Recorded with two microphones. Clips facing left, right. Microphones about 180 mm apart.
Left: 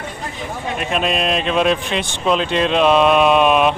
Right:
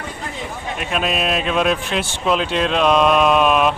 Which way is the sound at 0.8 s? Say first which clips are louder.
Left 1 dB; centre (ahead or behind).